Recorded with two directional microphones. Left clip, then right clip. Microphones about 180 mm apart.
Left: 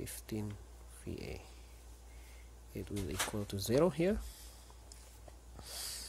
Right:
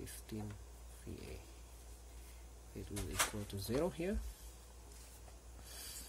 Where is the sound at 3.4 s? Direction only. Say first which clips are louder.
Left 7 dB; 50° left (ahead or behind).